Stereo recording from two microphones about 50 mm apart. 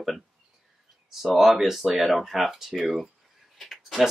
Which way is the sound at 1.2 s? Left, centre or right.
Centre.